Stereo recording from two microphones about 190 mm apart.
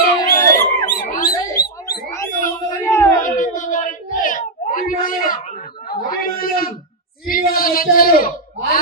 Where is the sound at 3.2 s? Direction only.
45° left (ahead or behind).